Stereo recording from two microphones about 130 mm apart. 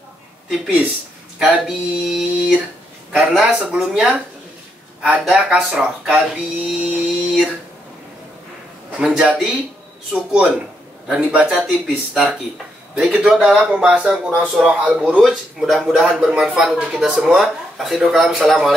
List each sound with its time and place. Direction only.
0.5 s a man's voice: 10° right (ahead or behind)
9.0 s a man's voice: 10° right (ahead or behind)